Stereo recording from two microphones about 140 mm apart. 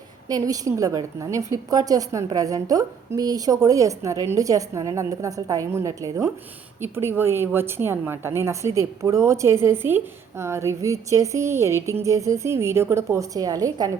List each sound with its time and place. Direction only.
0.3 s a woman's voice: 25° right (ahead or behind)